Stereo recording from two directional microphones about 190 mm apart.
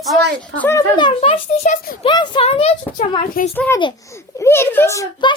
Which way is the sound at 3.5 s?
10° left (ahead or behind).